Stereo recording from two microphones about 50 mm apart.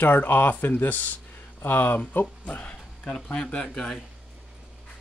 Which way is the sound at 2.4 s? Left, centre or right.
Left.